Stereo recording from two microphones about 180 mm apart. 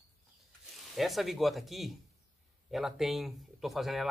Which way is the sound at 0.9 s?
Centre (ahead or behind).